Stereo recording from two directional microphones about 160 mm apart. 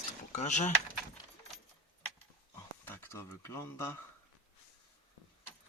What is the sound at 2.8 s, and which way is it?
Speech, 15° left (ahead or behind).